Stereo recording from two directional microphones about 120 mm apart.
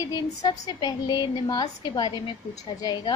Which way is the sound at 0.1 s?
35° left (ahead or behind).